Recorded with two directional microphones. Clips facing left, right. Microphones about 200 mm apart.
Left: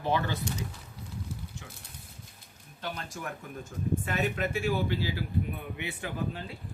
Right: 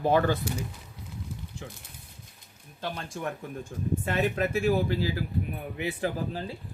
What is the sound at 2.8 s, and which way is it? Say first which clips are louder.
Speech: right 4 dB; 30° right (ahead or behind).